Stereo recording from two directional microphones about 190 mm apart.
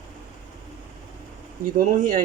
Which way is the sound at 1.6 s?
45° right (ahead or behind).